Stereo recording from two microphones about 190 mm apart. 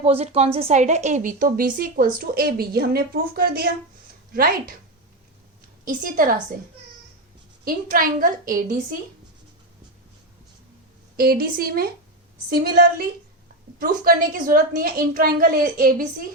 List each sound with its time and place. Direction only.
0.0 s a woman's voice: 35° right (ahead or behind); by 3.7 s 55° right (ahead or behind)
5.8 s a woman's voice: 45° right (ahead or behind)
7.6 s a woman's voice: 50° right (ahead or behind)
11.2 s a woman's voice: 50° right (ahead or behind)